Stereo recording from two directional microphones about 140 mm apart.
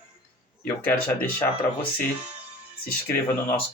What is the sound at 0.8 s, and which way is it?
Speech, 15° left (ahead or behind).